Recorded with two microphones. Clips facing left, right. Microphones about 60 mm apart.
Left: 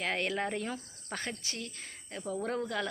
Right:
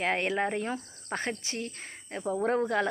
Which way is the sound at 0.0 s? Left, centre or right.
Right.